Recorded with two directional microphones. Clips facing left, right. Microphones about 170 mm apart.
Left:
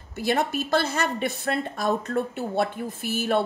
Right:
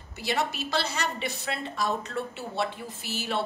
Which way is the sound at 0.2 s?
50° left (ahead or behind).